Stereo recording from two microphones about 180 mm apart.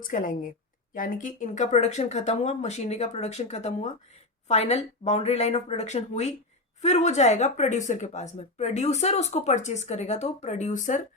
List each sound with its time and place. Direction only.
0.0 s a woman's voice: 50° left (ahead or behind)